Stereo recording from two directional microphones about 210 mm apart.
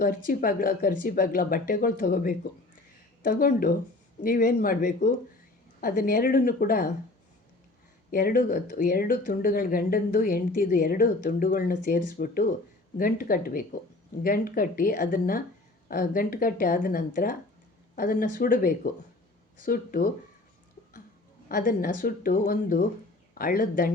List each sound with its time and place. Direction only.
0.3 s speech: 45° left (ahead or behind)
8.1 s speech: 45° left (ahead or behind)
21.5 s speech: 40° left (ahead or behind)